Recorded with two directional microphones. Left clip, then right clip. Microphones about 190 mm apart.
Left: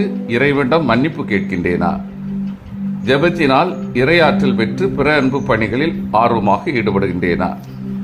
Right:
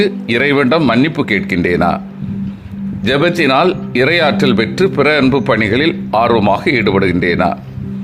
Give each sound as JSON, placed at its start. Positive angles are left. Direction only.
{"t": 0.0, "sound": "speech", "side_deg": -20}
{"t": 3.0, "sound": "speech", "side_deg": -20}